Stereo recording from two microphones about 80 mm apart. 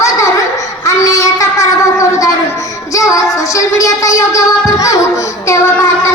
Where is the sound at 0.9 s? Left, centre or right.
Left.